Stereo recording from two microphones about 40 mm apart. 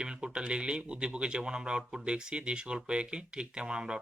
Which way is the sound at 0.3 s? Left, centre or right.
Right.